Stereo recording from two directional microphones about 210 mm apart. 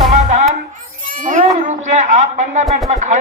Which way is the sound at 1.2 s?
35° right (ahead or behind).